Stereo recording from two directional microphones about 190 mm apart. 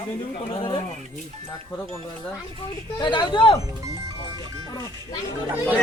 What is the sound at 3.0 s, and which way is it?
Speech, 25° left (ahead or behind).